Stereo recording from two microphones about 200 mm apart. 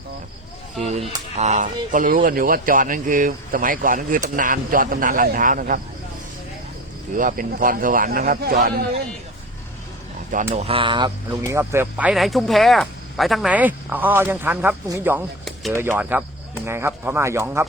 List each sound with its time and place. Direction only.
0.9 s speech: 30° right (ahead or behind)
7.2 s speech: 40° right (ahead or behind)
10.5 s speech: 30° right (ahead or behind); by 17.7 s 10° right (ahead or behind)